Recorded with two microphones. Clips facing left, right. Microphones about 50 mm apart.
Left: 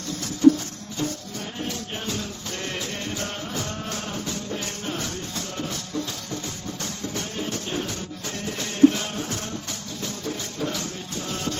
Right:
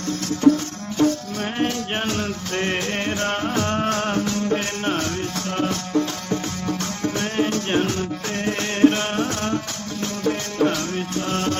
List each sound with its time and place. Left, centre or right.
0.4 s music: right